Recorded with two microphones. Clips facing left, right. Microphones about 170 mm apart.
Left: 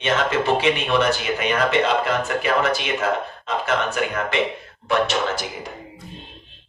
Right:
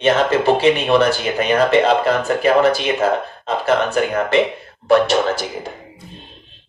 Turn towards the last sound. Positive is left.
turn(degrees=-35)  # may be behind; listen again after turning